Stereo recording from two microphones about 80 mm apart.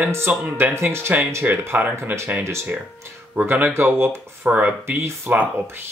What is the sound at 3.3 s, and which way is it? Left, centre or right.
Speech, right.